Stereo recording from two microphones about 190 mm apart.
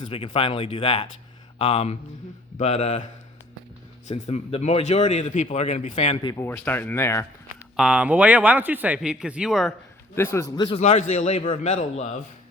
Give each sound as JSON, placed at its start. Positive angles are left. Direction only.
{"t": 0.0, "sound": "a man's voice", "side_deg": 30}
{"t": 4.1, "sound": "a man's voice", "side_deg": 35}
{"t": 6.3, "sound": "speech", "side_deg": 10}
{"t": 7.8, "sound": "speech", "side_deg": -5}
{"t": 10.2, "sound": "speech", "side_deg": 15}
{"t": 10.7, "sound": "a man's voice", "side_deg": 35}